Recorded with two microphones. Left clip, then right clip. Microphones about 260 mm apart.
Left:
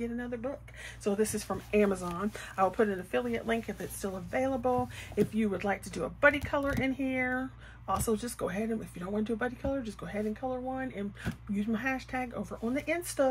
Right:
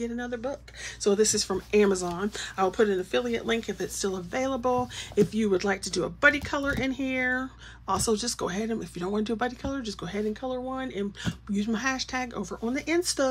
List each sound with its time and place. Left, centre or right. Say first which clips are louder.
0.0 s speech: right 4 dB; centre